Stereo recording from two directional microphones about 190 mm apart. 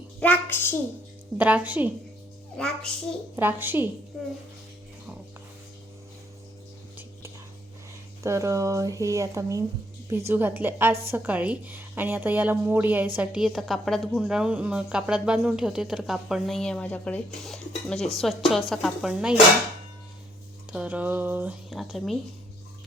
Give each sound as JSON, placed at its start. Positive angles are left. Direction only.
{"t": 0.2, "sound": "a sound", "side_deg": 10}
{"t": 1.4, "sound": "a woman's voice", "side_deg": -10}
{"t": 2.6, "sound": "a woman's voice", "side_deg": 5}
{"t": 3.3, "sound": "a woman's voice", "side_deg": -10}
{"t": 4.1, "sound": "a woman's voice", "side_deg": 0}
{"t": 8.2, "sound": "a woman's voice", "side_deg": -15}
{"t": 20.7, "sound": "a woman's voice", "side_deg": -10}